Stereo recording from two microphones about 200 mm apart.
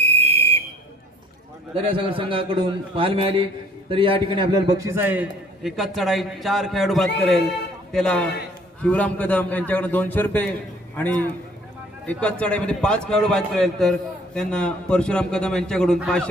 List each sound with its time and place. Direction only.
0.0 s whistle: 30° right (ahead or behind)
1.7 s a man's voice: 25° right (ahead or behind); by 16.3 s 5° left (ahead or behind)